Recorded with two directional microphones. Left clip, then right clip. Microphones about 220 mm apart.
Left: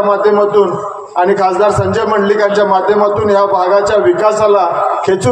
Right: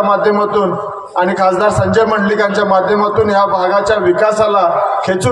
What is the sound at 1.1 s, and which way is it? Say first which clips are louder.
A man's voice: left 2 dB; 40° right (ahead or behind).